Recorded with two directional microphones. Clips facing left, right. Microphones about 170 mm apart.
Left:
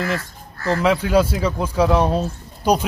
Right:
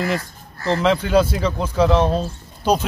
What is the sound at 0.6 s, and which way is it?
Speech, 25° right (ahead or behind).